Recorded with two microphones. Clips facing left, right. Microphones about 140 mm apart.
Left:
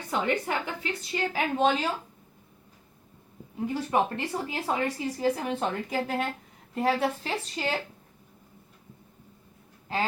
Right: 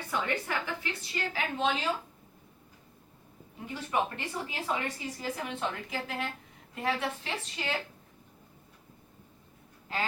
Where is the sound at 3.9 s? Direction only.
35° left (ahead or behind).